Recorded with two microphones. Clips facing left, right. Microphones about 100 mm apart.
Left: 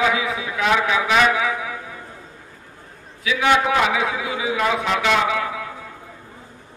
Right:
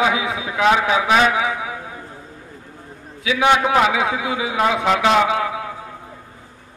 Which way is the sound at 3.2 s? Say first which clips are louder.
Right 2 dB; 25° right (ahead or behind).